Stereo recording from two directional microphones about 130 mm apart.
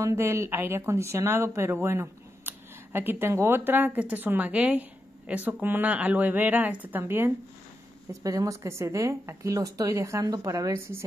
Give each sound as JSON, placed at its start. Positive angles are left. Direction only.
{"t": 0.0, "sound": "speech", "side_deg": -20}
{"t": 8.2, "sound": "speech", "side_deg": -25}